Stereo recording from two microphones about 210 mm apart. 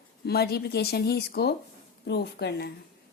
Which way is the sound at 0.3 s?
50° left (ahead or behind).